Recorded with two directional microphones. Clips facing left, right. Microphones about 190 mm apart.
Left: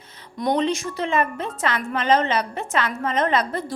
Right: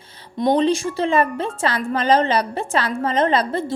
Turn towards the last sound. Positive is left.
turn(degrees=-30)  # may be behind; listen again after turning